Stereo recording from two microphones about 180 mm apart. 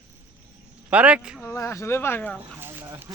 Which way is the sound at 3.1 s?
20° right (ahead or behind).